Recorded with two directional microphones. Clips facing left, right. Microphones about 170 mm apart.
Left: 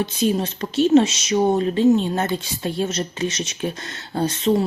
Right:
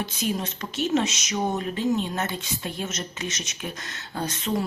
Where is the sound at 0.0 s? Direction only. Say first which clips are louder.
Left 7 dB; 30° left (ahead or behind).